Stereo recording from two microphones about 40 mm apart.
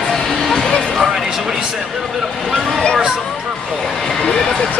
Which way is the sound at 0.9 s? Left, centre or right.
Centre.